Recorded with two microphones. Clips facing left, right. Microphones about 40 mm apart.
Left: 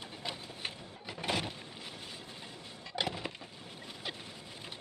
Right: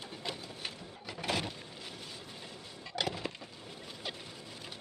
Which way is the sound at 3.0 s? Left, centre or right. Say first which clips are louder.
Even; centre.